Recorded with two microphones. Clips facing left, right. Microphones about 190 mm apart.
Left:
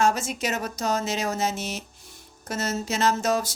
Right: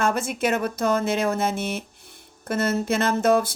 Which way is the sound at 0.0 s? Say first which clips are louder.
Right 1 dB; 55° right (ahead or behind).